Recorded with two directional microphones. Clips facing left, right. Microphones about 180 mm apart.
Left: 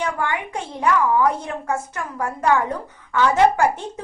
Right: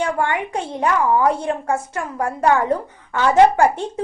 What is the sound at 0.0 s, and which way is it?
A woman's voice, 35° right (ahead or behind).